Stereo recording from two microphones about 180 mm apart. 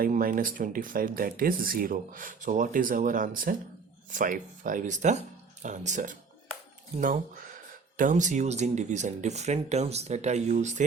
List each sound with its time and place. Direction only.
0.0 s speech: 50° right (ahead or behind)
7.9 s speech: 45° right (ahead or behind)